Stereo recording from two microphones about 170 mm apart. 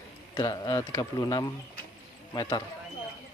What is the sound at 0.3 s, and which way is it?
Speech, 25° left (ahead or behind).